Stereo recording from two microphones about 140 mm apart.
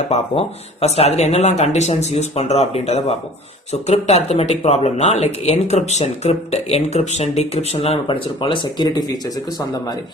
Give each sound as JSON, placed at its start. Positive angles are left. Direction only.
{"t": 0.1, "sound": "speech", "side_deg": 50}